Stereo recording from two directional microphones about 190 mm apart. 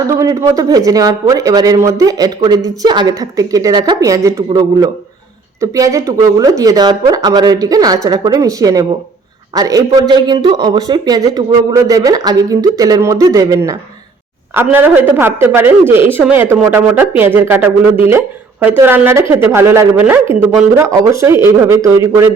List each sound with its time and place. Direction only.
0.1 s a man's voice: 15° right (ahead or behind)